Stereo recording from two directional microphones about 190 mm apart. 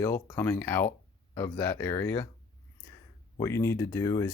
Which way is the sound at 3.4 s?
15° left (ahead or behind).